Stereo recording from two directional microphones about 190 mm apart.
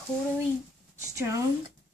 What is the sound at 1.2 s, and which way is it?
Speech, 15° right (ahead or behind).